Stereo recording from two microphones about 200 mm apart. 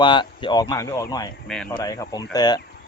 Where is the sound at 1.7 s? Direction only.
15° left (ahead or behind).